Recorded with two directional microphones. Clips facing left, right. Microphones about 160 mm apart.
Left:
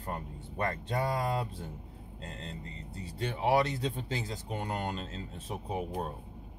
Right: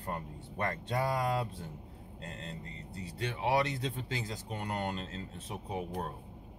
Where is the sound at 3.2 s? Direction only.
35° left (ahead or behind).